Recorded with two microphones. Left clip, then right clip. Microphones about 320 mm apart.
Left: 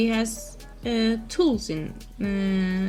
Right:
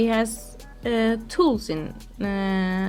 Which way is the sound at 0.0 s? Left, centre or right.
Centre.